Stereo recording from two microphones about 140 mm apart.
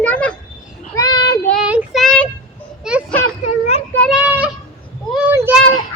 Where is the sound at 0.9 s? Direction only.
30° left (ahead or behind).